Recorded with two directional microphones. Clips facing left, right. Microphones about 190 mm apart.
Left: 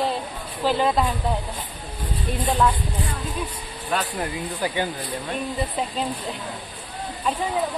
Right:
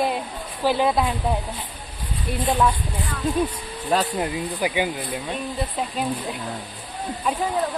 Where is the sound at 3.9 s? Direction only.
35° right (ahead or behind).